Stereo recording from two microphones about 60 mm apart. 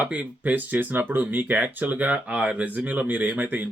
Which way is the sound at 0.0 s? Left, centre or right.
Right.